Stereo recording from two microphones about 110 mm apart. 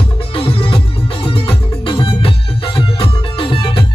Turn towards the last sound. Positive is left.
turn(degrees=50)  # may be behind; listen again after turning